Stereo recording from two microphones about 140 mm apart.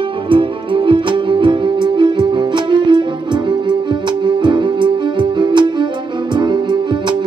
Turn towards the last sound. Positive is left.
turn(degrees=-35)  # may be behind; listen again after turning